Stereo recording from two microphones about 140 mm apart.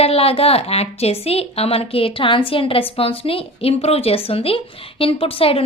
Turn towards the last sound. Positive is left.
turn(degrees=40)  # may be behind; listen again after turning